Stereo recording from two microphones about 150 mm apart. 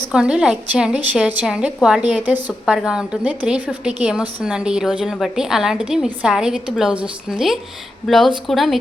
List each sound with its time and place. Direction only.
0.1 s a woman's voice: 5° right (ahead or behind)